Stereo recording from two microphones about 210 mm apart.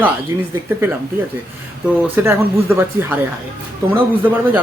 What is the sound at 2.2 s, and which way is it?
Speech, 10° right (ahead or behind).